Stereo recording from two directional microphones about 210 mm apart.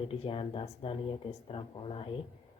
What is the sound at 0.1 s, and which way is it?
A woman's voice, 25° left (ahead or behind).